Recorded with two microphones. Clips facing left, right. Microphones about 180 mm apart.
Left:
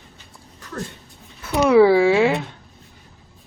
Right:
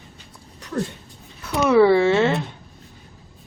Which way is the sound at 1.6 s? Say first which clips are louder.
Left 2 dB; 10° left (ahead or behind).